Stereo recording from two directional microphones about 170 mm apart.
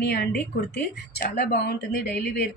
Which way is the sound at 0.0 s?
70° left (ahead or behind).